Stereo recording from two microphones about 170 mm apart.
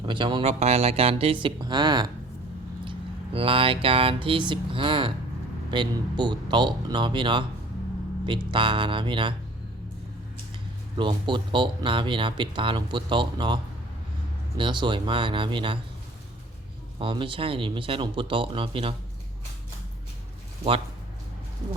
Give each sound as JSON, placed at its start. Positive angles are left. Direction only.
{"t": 0.0, "sound": "speech", "side_deg": -30}
{"t": 3.3, "sound": "speech", "side_deg": -30}
{"t": 10.9, "sound": "speech", "side_deg": -30}
{"t": 14.6, "sound": "speech", "side_deg": -25}
{"t": 17.0, "sound": "speech", "side_deg": -30}